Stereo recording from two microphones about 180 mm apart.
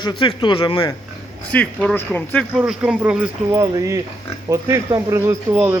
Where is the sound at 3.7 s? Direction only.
20° right (ahead or behind).